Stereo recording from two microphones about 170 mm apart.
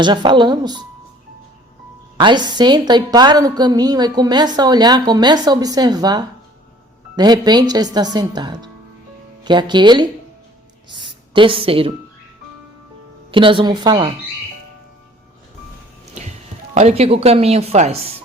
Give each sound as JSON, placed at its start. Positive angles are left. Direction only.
{"t": 0.0, "sound": "a woman's voice", "side_deg": -25}
{"t": 2.1, "sound": "a woman's voice", "side_deg": -25}
{"t": 13.3, "sound": "a woman's voice", "side_deg": -30}
{"t": 16.7, "sound": "speech", "side_deg": -40}